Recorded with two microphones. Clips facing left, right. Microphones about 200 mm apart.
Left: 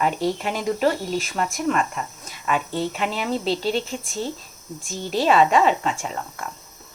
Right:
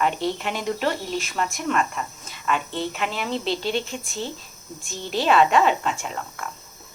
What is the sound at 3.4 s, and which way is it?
Speech, 35° left (ahead or behind).